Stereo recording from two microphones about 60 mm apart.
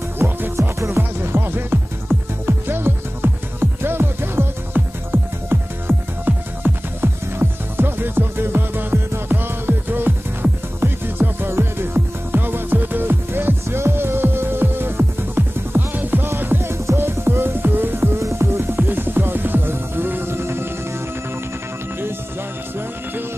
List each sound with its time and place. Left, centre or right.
0.2 s music: right
18.8 s music: right